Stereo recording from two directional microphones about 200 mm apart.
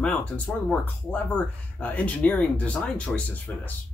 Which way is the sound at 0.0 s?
5° left (ahead or behind).